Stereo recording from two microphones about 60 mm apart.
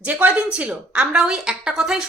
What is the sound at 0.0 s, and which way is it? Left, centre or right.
A woman's voice, right.